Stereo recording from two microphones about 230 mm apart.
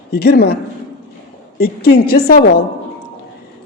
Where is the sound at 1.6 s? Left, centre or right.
Left.